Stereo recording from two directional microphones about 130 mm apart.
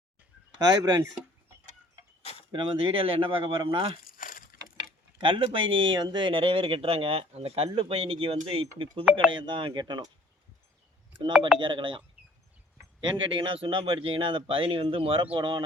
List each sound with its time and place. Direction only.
0.5 s speech: 35° right (ahead or behind)
2.5 s speech: 40° right (ahead or behind)
4.0 s a sound: 90° left
5.2 s speech: 40° right (ahead or behind)
11.6 s speech: 40° right (ahead or behind)